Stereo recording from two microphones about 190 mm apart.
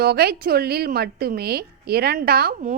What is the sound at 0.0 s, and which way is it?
A woman's voice, 55° right (ahead or behind).